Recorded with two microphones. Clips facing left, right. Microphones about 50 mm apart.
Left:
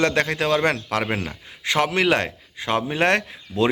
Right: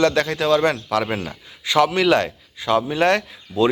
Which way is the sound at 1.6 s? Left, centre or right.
Left.